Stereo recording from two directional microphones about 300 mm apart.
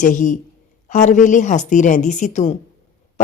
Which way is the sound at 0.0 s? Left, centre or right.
Left.